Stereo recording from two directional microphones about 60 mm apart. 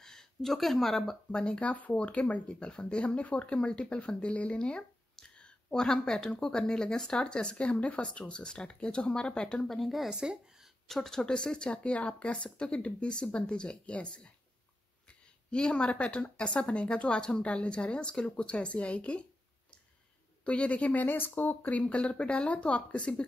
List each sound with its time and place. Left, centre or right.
0.0 s speech: centre
1.3 s speech: centre
9.7 s speech: centre
10.1 s speech: centre
10.9 s speech: centre
20.4 s speech: left